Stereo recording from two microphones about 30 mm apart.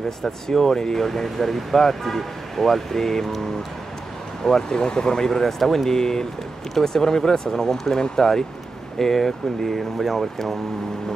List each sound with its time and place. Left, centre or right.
0.2 s speech: centre
4.5 s speech: left
5.4 s speech: centre